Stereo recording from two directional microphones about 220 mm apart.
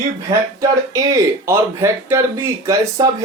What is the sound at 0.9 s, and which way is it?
Speech, 15° right (ahead or behind).